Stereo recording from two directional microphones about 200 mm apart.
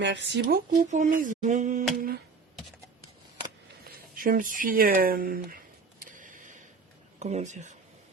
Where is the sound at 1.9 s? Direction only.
45° right (ahead or behind).